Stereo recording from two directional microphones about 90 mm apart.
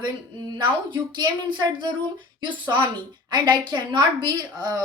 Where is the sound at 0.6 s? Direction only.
60° right (ahead or behind).